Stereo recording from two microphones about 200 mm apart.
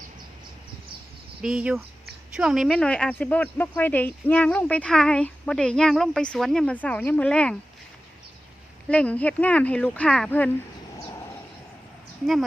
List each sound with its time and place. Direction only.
1.4 s speech: 5° right (ahead or behind)
8.9 s speech: 5° left (ahead or behind)
12.2 s speech: centre (ahead or behind)